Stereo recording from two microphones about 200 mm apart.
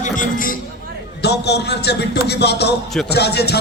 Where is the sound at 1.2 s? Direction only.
55° left (ahead or behind).